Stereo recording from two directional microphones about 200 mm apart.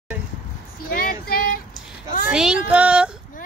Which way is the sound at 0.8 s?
45° left (ahead or behind).